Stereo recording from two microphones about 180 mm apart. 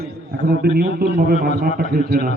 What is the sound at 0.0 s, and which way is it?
A man's voice, 60° right (ahead or behind).